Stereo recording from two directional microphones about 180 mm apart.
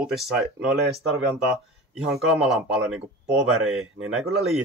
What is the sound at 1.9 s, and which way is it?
Speech, 5° right (ahead or behind).